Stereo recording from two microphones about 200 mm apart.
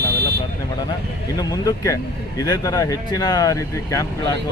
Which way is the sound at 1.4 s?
15° left (ahead or behind).